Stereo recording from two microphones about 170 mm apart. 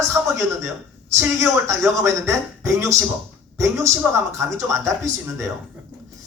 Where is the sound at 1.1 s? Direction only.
20° right (ahead or behind).